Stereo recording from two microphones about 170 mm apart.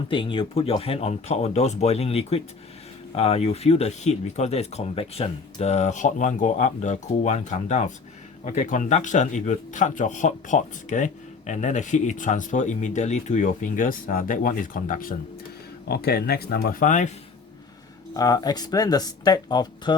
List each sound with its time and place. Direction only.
0.1 s speech: 30° left (ahead or behind); by 15.1 s 55° left (ahead or behind)
15.9 s speech: 65° left (ahead or behind); by 17.1 s 50° left (ahead or behind)
18.1 s speech: 20° left (ahead or behind)